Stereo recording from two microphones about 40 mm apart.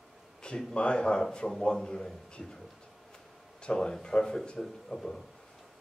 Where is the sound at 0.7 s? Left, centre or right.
Left.